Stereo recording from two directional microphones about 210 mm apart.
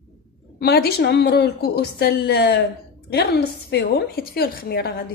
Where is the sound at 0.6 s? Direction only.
50° left (ahead or behind).